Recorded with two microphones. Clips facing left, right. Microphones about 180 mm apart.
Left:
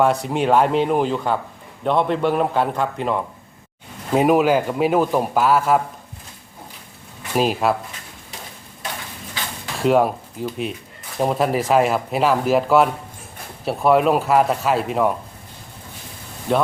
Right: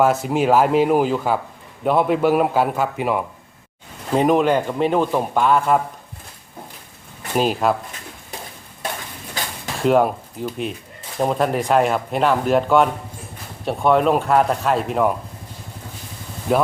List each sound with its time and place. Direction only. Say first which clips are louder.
0.0 s a man's voice: right 1 dB; centre (ahead or behind)
4.1 s speech: left 1 dB; 5° left (ahead or behind)
7.3 s speech: even; centre (ahead or behind)
9.7 s speech: even; centre (ahead or behind)
16.5 s speech: right 1 dB; 5° right (ahead or behind)